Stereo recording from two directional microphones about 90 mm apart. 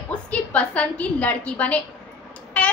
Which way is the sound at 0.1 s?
15° left (ahead or behind).